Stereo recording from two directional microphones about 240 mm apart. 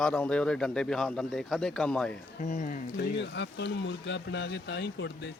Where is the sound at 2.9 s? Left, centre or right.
Left.